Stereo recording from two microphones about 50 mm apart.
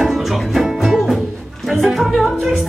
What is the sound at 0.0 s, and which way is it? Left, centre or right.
Music, centre.